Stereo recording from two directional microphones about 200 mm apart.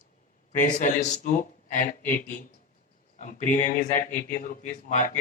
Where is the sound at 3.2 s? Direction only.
40° left (ahead or behind).